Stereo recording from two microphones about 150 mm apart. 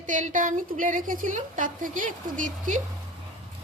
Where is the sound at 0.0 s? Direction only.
60° right (ahead or behind).